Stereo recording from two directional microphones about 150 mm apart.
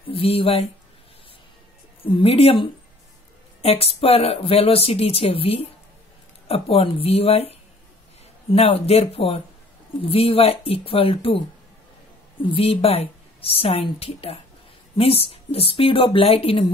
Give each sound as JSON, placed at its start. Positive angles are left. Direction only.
{"t": 0.1, "sound": "speech", "side_deg": 40}
{"t": 2.1, "sound": "speech", "side_deg": 40}
{"t": 12.4, "sound": "speech", "side_deg": 40}